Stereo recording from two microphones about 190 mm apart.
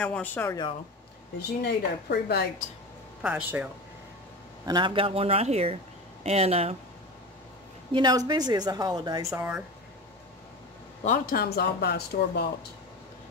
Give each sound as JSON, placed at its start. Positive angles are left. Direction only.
{"t": 0.0, "sound": "speech", "side_deg": 10}
{"t": 1.6, "sound": "speech", "side_deg": 60}
{"t": 3.2, "sound": "speech", "side_deg": -5}
{"t": 4.6, "sound": "speech", "side_deg": -25}
{"t": 7.9, "sound": "speech", "side_deg": -20}
{"t": 11.1, "sound": "speech", "side_deg": 50}